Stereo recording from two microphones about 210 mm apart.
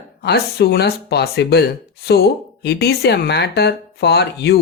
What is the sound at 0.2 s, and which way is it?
Speech, 50° left (ahead or behind).